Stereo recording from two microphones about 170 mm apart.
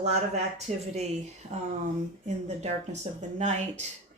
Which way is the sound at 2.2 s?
40° right (ahead or behind).